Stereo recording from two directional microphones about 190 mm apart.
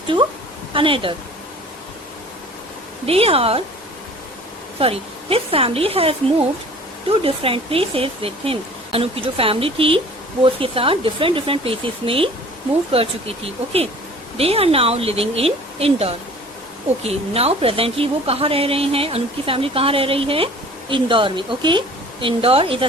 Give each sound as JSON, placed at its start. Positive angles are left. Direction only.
{"t": 0.7, "sound": "a woman's voice", "side_deg": -25}
{"t": 3.1, "sound": "speech", "side_deg": -30}
{"t": 4.8, "sound": "a woman's voice", "side_deg": -30}